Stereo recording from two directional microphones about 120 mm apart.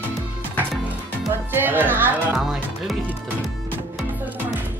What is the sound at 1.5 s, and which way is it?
Speech, 15° right (ahead or behind).